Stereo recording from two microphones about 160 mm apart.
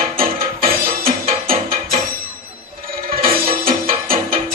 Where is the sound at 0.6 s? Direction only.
65° right (ahead or behind).